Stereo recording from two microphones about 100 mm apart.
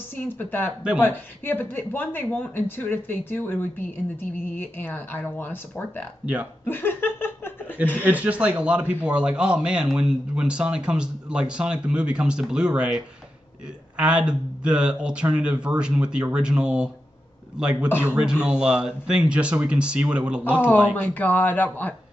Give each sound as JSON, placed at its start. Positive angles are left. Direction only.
{"t": 0.1, "sound": "speech", "side_deg": 20}
{"t": 6.6, "sound": "laughter", "side_deg": 20}
{"t": 8.0, "sound": "speech", "side_deg": -15}
{"t": 17.8, "sound": "speech", "side_deg": 25}
{"t": 18.1, "sound": "speech", "side_deg": -10}
{"t": 20.9, "sound": "a man's voice", "side_deg": 15}